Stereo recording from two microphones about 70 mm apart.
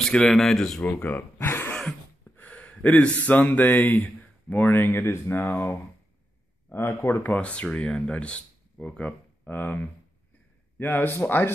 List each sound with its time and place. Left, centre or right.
0.1 s speech: centre
0.8 s speech: left
1.7 s a sound: centre
2.3 s speech: left
6.7 s speech: left
7.3 s speech: centre